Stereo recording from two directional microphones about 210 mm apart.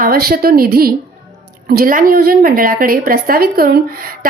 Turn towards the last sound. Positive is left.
turn(degrees=-45)  # may be behind; listen again after turning